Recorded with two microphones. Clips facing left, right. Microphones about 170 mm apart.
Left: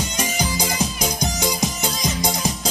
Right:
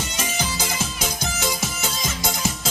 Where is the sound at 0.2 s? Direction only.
15° left (ahead or behind).